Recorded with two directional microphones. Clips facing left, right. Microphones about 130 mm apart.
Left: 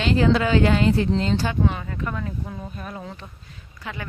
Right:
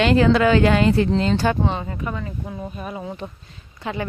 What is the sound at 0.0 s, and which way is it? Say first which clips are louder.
Speech: right 4 dB; 70° right (ahead or behind).